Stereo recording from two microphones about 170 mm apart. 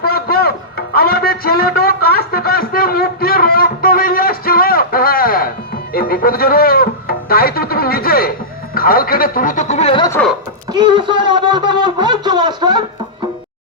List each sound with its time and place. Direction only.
0.0 s music: 65° left (ahead or behind)
8.7 s speech: 60° left (ahead or behind); by 10.1 s 30° left (ahead or behind)
10.7 s speech: 25° right (ahead or behind)